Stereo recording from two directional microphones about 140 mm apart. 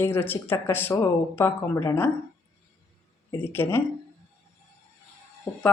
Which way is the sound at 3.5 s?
15° left (ahead or behind).